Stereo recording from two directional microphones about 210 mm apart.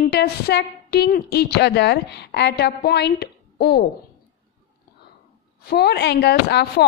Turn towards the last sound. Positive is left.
turn(degrees=50)  # may be behind; listen again after turning